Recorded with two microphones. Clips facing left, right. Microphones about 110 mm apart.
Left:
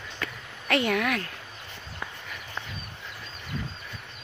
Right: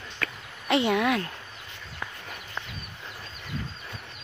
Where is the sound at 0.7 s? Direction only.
20° right (ahead or behind).